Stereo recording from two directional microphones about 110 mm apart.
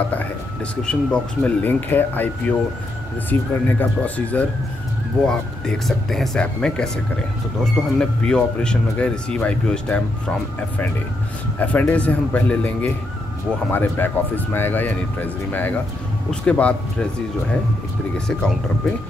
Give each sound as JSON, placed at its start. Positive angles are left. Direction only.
{"t": 0.8, "sound": "speech", "side_deg": 10}
{"t": 11.6, "sound": "speech", "side_deg": 10}
{"t": 16.3, "sound": "speech", "side_deg": 10}
{"t": 18.1, "sound": "speech", "side_deg": 5}